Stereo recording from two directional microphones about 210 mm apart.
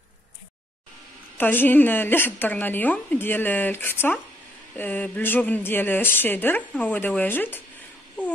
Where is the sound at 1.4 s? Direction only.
10° left (ahead or behind).